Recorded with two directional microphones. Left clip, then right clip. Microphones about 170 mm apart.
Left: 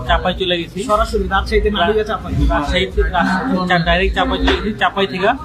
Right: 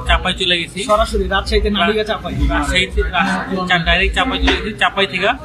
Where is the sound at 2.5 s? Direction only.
10° left (ahead or behind).